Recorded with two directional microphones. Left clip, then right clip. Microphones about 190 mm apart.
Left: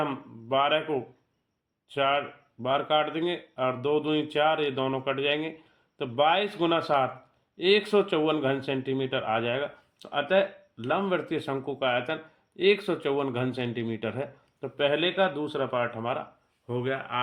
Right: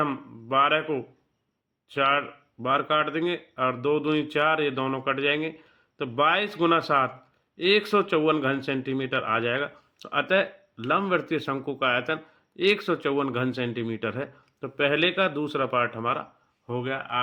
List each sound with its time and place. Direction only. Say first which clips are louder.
0.0 s a man's voice: right 3 dB; 20° right (ahead or behind)
16.6 s speech: right 1 dB; 10° right (ahead or behind)